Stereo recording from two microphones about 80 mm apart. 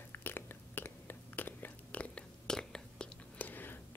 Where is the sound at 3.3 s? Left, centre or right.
Left.